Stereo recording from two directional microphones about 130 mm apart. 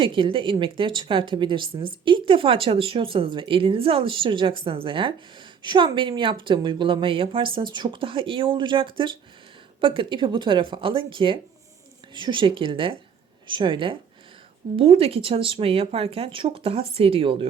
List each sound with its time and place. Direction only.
0.0 s speech: 40° right (ahead or behind)